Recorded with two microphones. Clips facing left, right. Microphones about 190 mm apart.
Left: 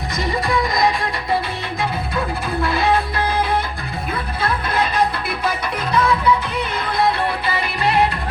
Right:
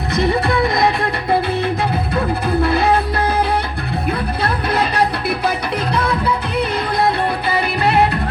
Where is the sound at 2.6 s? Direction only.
60° right (ahead or behind).